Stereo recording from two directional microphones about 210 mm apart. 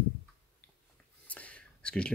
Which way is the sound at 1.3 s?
5° left (ahead or behind).